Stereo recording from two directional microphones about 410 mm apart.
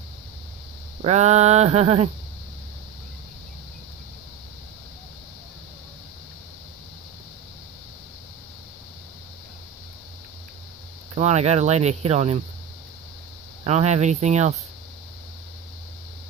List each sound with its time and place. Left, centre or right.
1.0 s speech: centre
11.1 s speech: centre
13.7 s speech: centre